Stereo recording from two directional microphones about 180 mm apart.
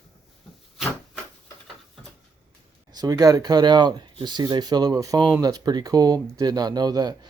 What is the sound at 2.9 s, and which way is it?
Speech, 20° right (ahead or behind).